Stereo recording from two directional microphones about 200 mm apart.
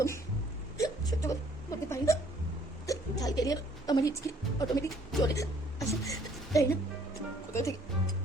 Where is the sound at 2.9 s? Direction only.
15° left (ahead or behind).